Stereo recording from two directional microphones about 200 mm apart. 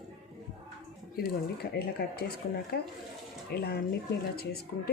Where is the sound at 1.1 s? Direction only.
50° left (ahead or behind).